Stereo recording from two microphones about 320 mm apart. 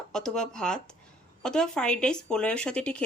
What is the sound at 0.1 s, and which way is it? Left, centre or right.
Speech, centre.